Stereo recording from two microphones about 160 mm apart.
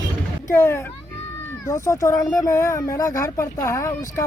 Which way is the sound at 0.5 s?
15° left (ahead or behind).